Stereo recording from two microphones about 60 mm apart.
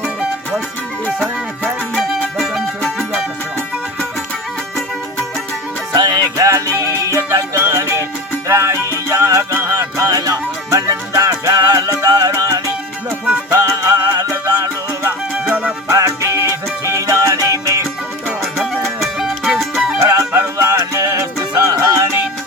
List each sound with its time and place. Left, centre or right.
2.0 s music: centre
5.9 s music: right
6.5 s music: right
9.7 s music: right
11.2 s music: right
13.1 s music: right
13.5 s music: right
14.4 s music: right
15.4 s music: right
15.9 s music: right
16.5 s music: right
17.3 s music: right
18.5 s music: centre
20.0 s music: right